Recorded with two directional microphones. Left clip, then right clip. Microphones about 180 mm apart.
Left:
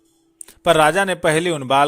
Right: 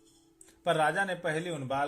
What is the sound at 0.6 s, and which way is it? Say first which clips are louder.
Speech: left 13 dB; 40° left (ahead or behind).